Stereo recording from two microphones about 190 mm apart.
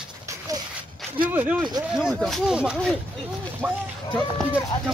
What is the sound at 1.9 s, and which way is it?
Speech, centre (ahead or behind).